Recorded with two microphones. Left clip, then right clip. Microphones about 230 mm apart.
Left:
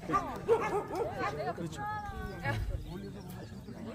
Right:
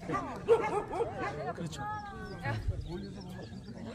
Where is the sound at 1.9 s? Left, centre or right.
Left.